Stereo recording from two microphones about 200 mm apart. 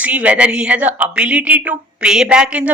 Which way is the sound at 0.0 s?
5° right (ahead or behind).